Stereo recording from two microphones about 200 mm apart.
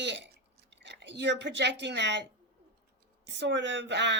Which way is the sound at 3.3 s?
60° right (ahead or behind).